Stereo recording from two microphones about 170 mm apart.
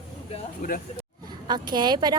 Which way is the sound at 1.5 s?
25° right (ahead or behind).